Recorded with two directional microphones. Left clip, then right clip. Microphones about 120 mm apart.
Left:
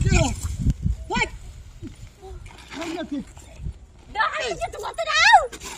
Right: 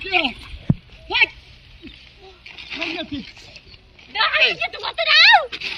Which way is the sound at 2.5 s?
40° left (ahead or behind).